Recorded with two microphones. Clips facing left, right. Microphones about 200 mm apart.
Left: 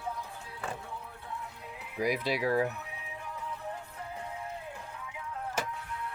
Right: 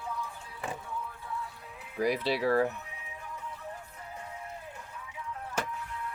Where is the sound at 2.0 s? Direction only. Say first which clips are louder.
Right 2 dB; 10° left (ahead or behind).